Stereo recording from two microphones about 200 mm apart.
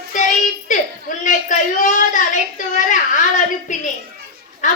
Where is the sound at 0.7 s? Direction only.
40° left (ahead or behind).